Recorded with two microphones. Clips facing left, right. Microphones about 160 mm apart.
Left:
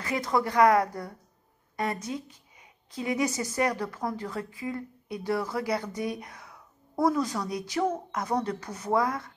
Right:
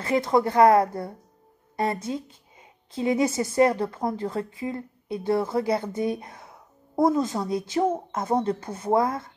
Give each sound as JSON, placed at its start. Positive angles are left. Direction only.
{"t": 0.0, "sound": "a woman's voice", "side_deg": -25}